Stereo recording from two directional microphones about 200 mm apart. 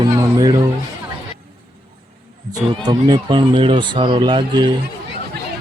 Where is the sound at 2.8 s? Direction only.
25° right (ahead or behind).